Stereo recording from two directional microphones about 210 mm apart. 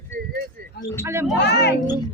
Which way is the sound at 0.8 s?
50° left (ahead or behind).